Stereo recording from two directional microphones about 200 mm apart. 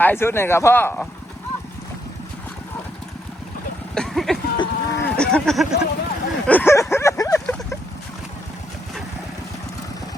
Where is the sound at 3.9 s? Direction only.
Centre (ahead or behind).